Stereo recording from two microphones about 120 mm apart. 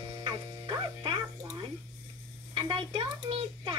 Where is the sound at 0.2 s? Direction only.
40° right (ahead or behind).